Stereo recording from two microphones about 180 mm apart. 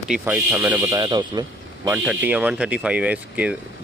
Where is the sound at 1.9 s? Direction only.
10° right (ahead or behind).